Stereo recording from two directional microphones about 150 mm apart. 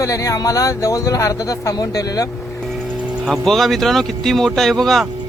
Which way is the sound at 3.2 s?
Centre (ahead or behind).